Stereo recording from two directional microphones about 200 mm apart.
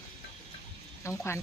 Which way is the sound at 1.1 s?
10° left (ahead or behind).